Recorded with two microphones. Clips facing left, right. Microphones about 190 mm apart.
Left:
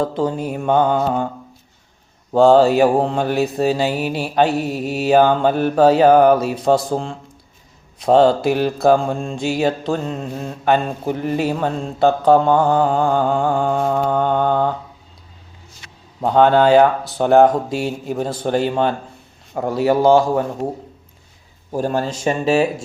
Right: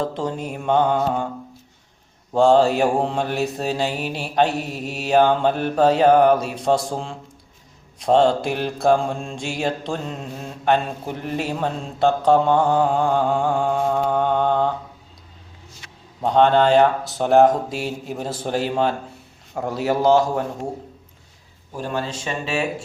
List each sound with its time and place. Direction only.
0.0 s mantra: 5° left (ahead or behind)
2.3 s mantra: centre (ahead or behind)
16.2 s mantra: 5° left (ahead or behind)
21.7 s speech: 40° left (ahead or behind)